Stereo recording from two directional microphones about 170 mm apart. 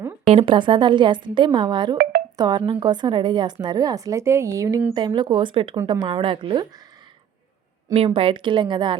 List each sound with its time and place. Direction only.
0.3 s a woman's voice: 30° right (ahead or behind)
7.9 s a woman's voice: 35° right (ahead or behind)